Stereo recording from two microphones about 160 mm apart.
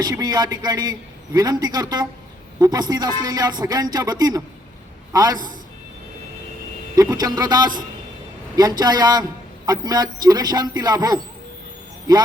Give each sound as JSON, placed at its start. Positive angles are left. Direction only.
{"t": 0.0, "sound": "a man's voice", "side_deg": -25}
{"t": 6.9, "sound": "a man's voice", "side_deg": -25}